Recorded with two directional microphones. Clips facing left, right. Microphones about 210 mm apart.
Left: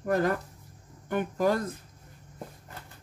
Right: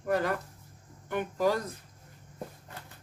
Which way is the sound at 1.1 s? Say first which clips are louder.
Left 2 dB; 50° left (ahead or behind).